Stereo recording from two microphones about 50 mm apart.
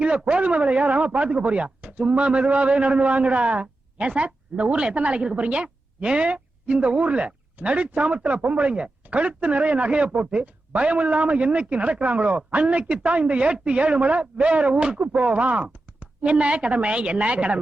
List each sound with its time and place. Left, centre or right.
0.0 s speech: right